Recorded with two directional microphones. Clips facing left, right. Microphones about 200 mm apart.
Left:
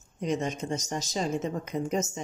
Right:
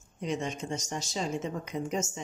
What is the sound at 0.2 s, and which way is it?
A woman's voice, 40° left (ahead or behind).